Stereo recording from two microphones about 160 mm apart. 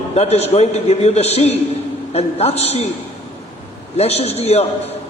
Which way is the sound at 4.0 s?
40° left (ahead or behind).